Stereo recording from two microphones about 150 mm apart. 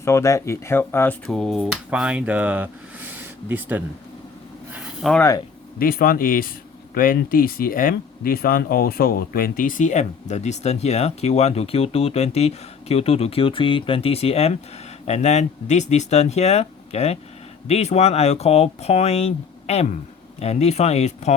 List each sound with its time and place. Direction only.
0.0 s speech: 20° left (ahead or behind)
1.3 s speech: centre (ahead or behind)
5.0 s speech: centre (ahead or behind)
5.8 s speech: 75° left (ahead or behind); by 21.3 s 45° left (ahead or behind)